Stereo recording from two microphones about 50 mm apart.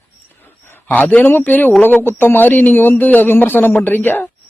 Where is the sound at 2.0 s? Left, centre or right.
Left.